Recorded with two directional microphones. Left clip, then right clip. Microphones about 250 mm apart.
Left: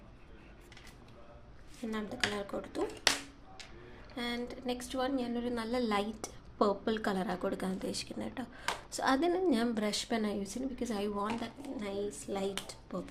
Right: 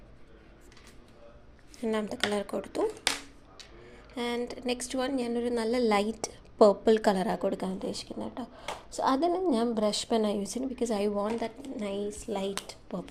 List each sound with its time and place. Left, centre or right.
1.9 s speech: right
4.1 s a woman's voice: right